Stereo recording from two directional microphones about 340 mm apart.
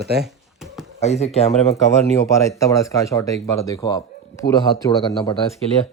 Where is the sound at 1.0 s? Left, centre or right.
Centre.